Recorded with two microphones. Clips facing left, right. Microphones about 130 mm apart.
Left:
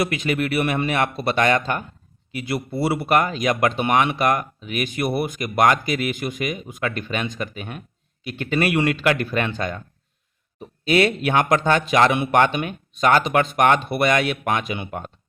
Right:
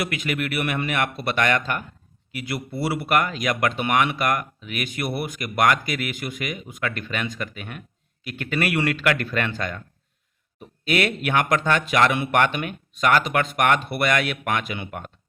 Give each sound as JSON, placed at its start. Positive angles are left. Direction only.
{"t": 0.0, "sound": "speech", "side_deg": 30}